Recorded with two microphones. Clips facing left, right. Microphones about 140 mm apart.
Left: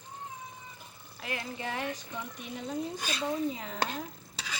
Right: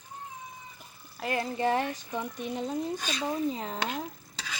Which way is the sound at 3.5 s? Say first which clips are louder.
Right 4 dB; 35° right (ahead or behind).